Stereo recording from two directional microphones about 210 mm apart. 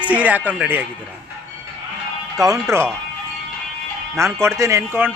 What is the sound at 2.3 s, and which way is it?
Speech, 15° right (ahead or behind).